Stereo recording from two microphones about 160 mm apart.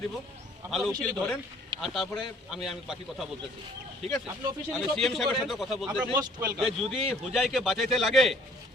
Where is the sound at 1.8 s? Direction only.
Centre (ahead or behind).